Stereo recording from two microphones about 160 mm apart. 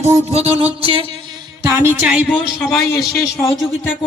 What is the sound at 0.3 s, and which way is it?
Music, 40° right (ahead or behind).